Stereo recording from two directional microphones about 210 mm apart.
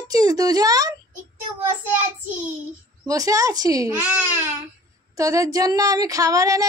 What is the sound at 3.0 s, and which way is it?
Speech, 15° right (ahead or behind).